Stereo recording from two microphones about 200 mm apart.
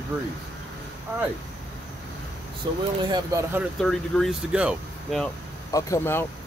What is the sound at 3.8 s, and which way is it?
Speech, centre (ahead or behind).